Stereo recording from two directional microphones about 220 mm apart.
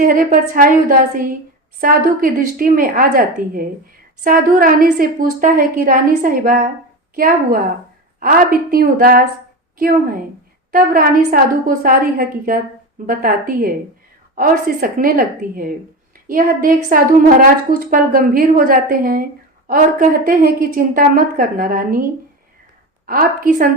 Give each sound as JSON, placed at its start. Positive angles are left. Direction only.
{"t": 0.0, "sound": "a woman's voice", "side_deg": -40}
{"t": 23.0, "sound": "a woman's voice", "side_deg": -40}